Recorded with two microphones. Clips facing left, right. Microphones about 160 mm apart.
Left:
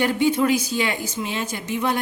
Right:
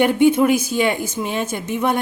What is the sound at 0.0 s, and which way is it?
A woman's voice, 55° right (ahead or behind).